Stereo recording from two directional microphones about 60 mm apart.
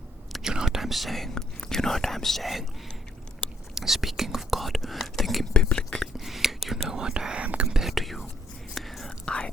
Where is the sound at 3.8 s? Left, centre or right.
Centre.